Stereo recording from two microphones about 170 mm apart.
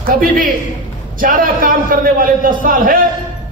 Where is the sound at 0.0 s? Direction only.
55° right (ahead or behind).